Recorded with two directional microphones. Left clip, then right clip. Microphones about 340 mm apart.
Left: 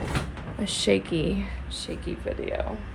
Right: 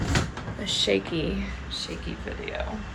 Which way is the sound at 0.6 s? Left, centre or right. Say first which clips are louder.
Even; centre.